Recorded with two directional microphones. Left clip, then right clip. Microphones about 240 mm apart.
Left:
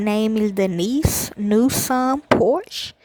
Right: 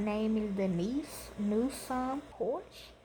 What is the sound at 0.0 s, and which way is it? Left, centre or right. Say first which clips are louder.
A woman's voice: left 13 dB; left.